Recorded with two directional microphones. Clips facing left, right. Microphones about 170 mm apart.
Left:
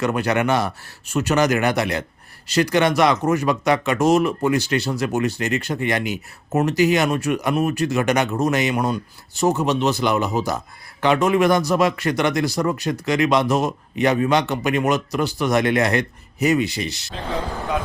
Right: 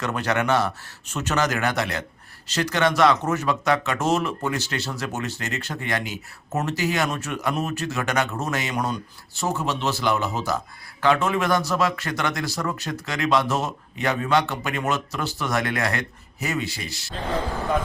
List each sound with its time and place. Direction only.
0.0 s speech: 10° left (ahead or behind)